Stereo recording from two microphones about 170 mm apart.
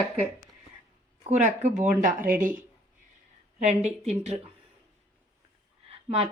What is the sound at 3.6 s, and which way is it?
Speech, 40° right (ahead or behind).